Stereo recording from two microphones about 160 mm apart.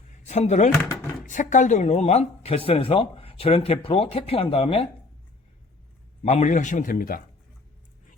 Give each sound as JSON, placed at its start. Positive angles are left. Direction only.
{"t": 0.1, "sound": "a sound", "side_deg": 45}
{"t": 1.2, "sound": "speech", "side_deg": 55}
{"t": 6.2, "sound": "a man's voice", "side_deg": 45}